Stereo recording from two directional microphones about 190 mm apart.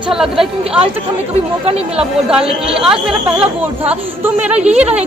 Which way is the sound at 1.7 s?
30° right (ahead or behind).